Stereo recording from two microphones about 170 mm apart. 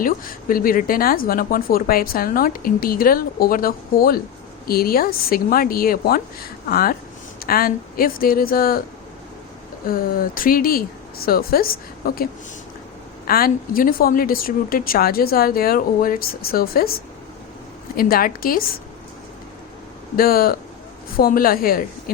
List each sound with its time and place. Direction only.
0.0 s speech: 55° left (ahead or behind)
9.8 s speech: 60° left (ahead or behind)
17.9 s speech: 60° left (ahead or behind)
20.1 s speech: 60° left (ahead or behind)